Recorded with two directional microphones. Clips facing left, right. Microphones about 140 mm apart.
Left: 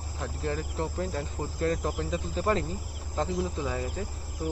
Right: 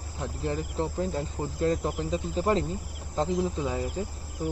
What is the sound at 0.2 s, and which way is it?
Speech, 20° right (ahead or behind).